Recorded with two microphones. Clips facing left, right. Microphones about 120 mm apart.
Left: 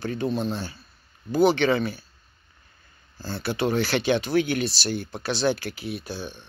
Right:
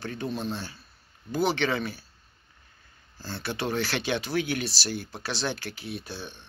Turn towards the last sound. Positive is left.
turn(degrees=0)  # may be behind; listen again after turning